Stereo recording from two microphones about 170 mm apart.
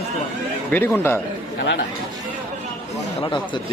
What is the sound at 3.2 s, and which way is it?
Speech, 30° left (ahead or behind).